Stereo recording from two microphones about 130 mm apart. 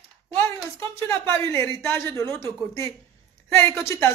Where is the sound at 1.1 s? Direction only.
20° left (ahead or behind).